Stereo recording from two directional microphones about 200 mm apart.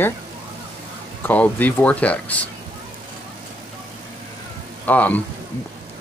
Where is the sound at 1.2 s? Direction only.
10° left (ahead or behind).